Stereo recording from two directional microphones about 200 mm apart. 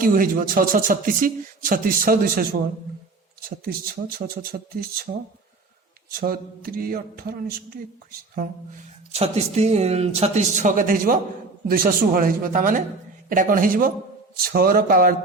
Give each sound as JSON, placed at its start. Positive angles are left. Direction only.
{"t": 0.0, "sound": "speech", "side_deg": -45}
{"t": 3.6, "sound": "speech", "side_deg": -50}
{"t": 8.4, "sound": "speech", "side_deg": -35}